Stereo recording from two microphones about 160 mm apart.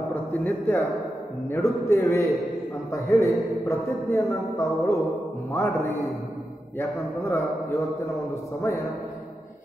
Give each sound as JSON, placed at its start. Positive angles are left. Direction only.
{"t": 0.1, "sound": "a man's voice", "side_deg": 10}